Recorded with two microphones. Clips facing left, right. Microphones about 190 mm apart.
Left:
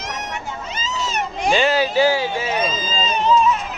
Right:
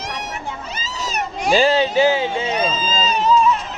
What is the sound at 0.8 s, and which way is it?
Cat, 40° right (ahead or behind).